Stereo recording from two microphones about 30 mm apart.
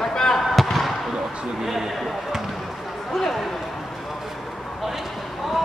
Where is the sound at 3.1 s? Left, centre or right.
Centre.